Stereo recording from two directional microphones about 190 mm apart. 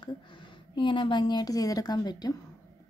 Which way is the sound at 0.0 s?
25° left (ahead or behind).